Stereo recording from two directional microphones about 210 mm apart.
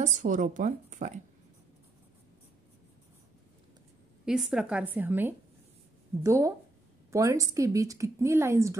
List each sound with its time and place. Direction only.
0.0 s a woman's voice: 35° right (ahead or behind)
4.3 s a woman's voice: 5° right (ahead or behind)